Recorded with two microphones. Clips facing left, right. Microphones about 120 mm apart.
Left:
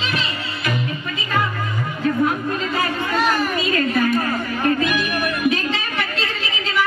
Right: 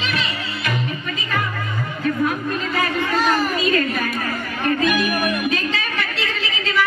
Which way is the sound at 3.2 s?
Centre (ahead or behind).